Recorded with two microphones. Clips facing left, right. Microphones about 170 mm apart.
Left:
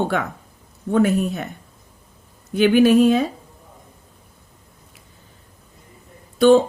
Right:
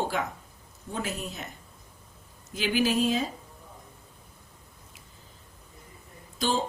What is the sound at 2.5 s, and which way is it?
Speech, 60° left (ahead or behind).